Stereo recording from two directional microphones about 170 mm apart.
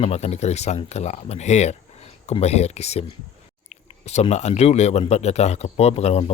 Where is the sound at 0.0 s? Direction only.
40° left (ahead or behind).